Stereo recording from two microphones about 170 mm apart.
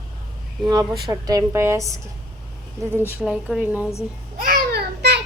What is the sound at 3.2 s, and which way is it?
Speech, 5° right (ahead or behind).